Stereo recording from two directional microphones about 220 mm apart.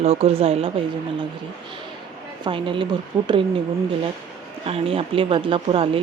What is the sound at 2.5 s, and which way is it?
Speech, 20° right (ahead or behind).